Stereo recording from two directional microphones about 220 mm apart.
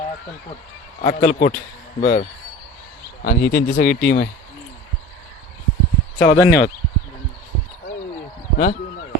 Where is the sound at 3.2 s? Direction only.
40° left (ahead or behind).